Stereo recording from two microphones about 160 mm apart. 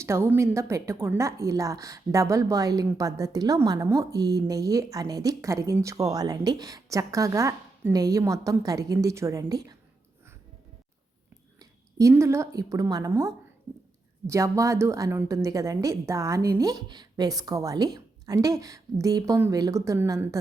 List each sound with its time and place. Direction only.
0.0 s a woman's voice: 15° right (ahead or behind)
11.6 s a woman's voice: 20° right (ahead or behind)